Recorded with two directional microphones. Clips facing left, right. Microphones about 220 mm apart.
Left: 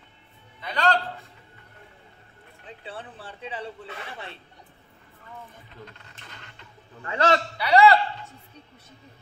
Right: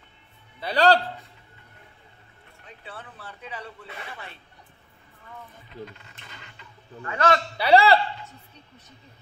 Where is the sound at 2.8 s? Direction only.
30° left (ahead or behind).